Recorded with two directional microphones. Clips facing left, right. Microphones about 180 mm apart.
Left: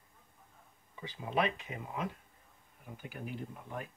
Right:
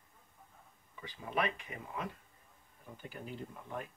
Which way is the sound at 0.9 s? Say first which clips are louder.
Left 3 dB; 20° left (ahead or behind).